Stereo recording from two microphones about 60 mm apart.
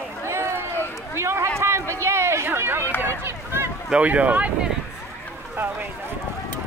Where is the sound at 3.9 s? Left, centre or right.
Right.